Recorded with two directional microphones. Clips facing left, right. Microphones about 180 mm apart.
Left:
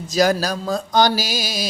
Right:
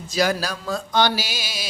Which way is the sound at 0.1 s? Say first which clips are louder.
Left 4 dB; 40° left (ahead or behind).